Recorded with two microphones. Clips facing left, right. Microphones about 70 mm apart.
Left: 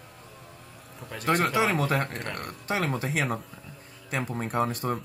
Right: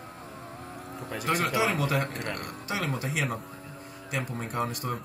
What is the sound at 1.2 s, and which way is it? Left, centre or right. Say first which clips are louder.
Speech: left 3 dB; left.